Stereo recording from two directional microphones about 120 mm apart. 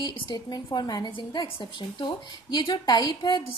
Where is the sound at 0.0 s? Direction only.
40° left (ahead or behind).